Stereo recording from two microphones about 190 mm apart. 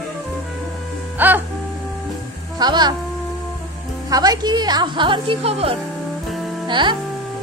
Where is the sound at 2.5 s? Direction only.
20° right (ahead or behind).